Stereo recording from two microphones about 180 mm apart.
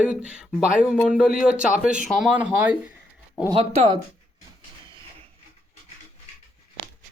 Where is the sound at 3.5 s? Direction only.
35° right (ahead or behind).